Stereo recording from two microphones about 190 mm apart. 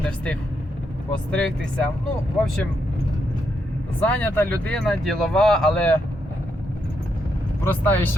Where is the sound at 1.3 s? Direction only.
5° left (ahead or behind).